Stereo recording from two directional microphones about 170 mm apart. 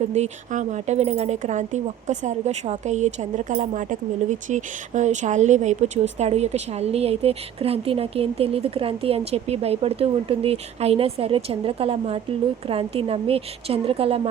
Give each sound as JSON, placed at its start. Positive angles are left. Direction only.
{"t": 0.1, "sound": "a woman's voice", "side_deg": -40}